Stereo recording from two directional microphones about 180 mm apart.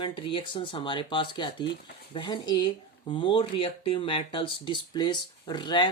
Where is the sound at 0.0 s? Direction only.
25° left (ahead or behind).